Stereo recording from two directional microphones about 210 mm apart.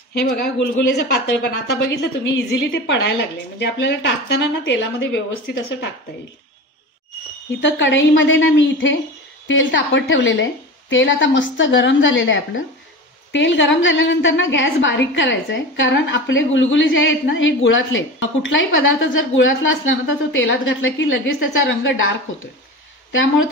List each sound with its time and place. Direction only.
0.1 s a man's voice: 55° left (ahead or behind)
1.9 s a woman's voice: 55° left (ahead or behind)
7.6 s a woman's voice: 60° left (ahead or behind)
23.1 s a woman's voice: 65° left (ahead or behind)